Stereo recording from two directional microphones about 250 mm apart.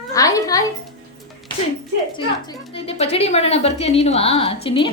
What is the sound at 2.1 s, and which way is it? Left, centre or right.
A woman's voice, left.